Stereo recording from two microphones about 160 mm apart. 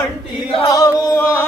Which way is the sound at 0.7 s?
20° left (ahead or behind).